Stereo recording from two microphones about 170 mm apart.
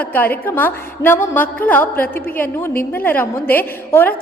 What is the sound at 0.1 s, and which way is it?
A woman's voice, 10° left (ahead or behind).